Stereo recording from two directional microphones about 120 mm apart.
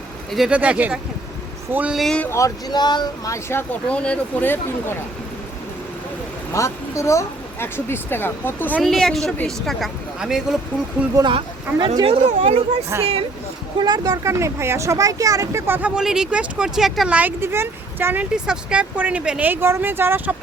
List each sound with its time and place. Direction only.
0.3 s speech: 5° right (ahead or behind)
2.0 s speech: 5° left (ahead or behind)
2.2 s speech: 25° left (ahead or behind)
3.3 s speech: 20° left (ahead or behind)
6.5 s speech: 25° left (ahead or behind)
8.8 s speech: centre (ahead or behind)
11.1 s speech: 35° right (ahead or behind)
12.0 s speech: 55° right (ahead or behind)
12.9 s speech: 25° right (ahead or behind)
13.7 s speech: 35° right (ahead or behind); by 15.9 s 20° right (ahead or behind)
16.0 s speech: 5° right (ahead or behind)
17.2 s speech: 15° right (ahead or behind)